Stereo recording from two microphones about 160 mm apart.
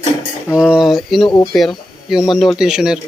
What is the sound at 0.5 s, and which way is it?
A man's voice, 5° right (ahead or behind).